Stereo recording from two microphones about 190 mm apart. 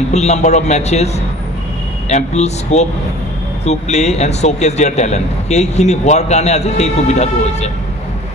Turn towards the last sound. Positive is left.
turn(degrees=35)  # may be behind; listen again after turning